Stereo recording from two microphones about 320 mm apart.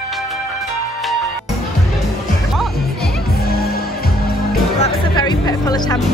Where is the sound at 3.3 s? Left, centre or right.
Left.